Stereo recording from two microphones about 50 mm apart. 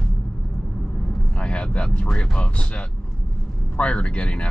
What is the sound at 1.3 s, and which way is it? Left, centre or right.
Speech, left.